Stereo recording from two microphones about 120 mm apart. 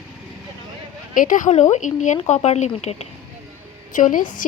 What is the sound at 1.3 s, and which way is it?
Speech, 85° left.